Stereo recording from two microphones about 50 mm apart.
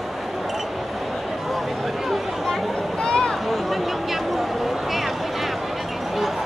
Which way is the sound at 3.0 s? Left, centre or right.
Centre.